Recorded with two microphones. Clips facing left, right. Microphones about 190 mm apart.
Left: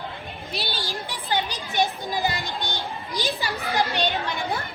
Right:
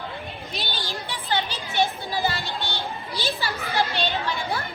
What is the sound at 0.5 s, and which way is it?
Speech, 35° left (ahead or behind).